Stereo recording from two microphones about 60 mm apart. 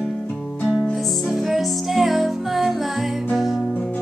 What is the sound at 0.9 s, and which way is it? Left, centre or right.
Music, centre.